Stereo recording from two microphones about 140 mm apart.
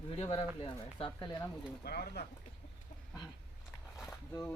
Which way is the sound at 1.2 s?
25° left (ahead or behind).